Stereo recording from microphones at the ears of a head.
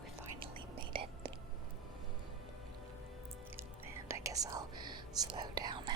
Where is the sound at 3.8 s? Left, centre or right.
Right.